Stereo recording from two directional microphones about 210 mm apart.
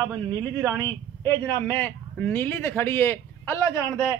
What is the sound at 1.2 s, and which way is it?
A man's voice, 10° left (ahead or behind).